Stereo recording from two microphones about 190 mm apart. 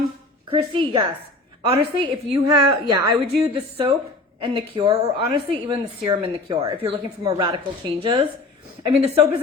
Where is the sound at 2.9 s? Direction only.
15° right (ahead or behind).